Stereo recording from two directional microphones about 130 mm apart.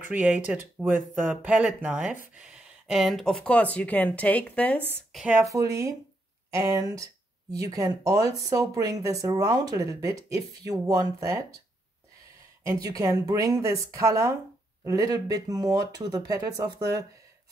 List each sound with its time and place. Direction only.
0.0 s speech: 10° right (ahead or behind); by 4.8 s 10° left (ahead or behind)
5.3 s speech: 25° right (ahead or behind)
12.8 s speech: 25° right (ahead or behind)